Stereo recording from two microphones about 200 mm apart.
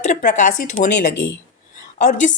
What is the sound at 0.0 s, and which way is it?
Speech, 40° left (ahead or behind).